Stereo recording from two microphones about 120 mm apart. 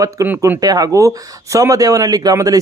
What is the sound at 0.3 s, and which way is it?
Speech, 15° right (ahead or behind).